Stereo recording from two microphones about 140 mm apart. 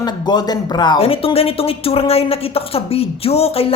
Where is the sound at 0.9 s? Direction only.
45° left (ahead or behind).